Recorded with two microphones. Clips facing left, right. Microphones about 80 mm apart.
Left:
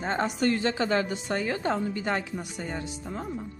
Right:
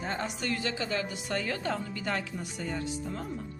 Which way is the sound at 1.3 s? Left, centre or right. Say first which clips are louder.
Left 3 dB; centre.